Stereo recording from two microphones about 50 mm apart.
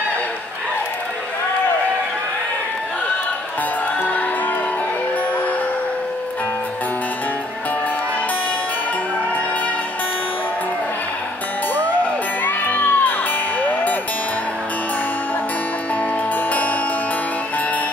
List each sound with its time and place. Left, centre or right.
11.7 s music: left